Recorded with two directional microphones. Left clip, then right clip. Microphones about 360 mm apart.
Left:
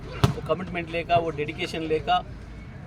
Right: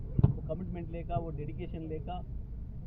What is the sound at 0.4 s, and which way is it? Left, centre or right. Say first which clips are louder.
A man's voice: left 13 dB; left.